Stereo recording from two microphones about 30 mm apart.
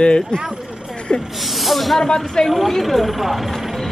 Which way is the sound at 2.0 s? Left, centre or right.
Left.